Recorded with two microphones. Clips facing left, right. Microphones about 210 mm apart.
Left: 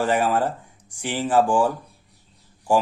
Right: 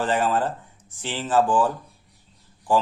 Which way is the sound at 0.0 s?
10° left (ahead or behind).